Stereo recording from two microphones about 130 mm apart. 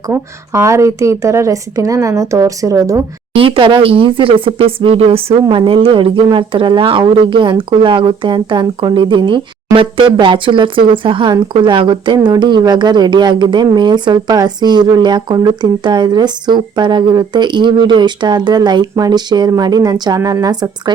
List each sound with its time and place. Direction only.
0.1 s speech: 20° right (ahead or behind)
3.3 s a woman's voice: 45° right (ahead or behind)